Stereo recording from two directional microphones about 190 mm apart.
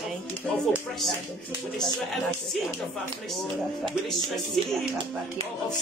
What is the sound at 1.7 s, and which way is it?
Speech, centre (ahead or behind).